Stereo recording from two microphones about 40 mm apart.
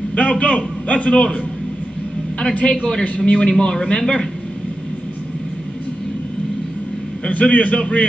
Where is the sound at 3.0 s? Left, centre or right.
Left.